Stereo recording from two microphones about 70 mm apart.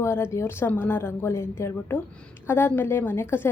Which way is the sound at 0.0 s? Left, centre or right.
Left.